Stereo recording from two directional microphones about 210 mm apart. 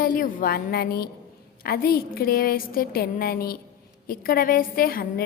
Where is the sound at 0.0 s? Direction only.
40° left (ahead or behind).